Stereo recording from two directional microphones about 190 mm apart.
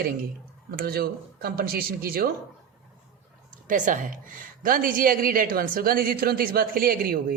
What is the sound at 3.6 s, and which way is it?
A woman's voice, 45° right (ahead or behind).